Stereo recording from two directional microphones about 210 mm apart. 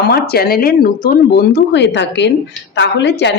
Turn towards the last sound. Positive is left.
turn(degrees=55)  # may be behind; listen again after turning